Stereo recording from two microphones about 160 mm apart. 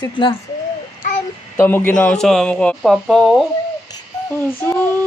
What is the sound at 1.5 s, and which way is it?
Speech, 15° left (ahead or behind).